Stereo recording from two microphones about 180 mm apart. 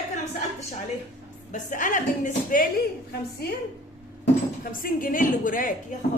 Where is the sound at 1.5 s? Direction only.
45° left (ahead or behind).